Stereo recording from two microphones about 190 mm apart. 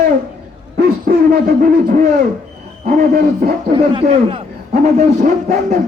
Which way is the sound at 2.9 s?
50° right (ahead or behind).